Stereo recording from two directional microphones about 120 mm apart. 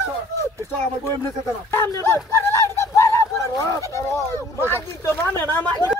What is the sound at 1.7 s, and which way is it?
Speech, 20° left (ahead or behind).